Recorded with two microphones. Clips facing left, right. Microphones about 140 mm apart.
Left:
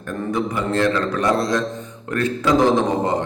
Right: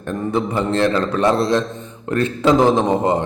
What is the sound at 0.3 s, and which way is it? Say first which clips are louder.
Speech: right 3 dB; 30° right (ahead or behind).